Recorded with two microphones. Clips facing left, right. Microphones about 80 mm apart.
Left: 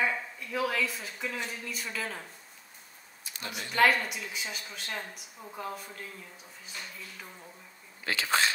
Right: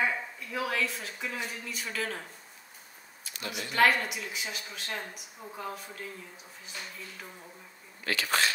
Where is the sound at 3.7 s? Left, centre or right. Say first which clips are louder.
Even; centre.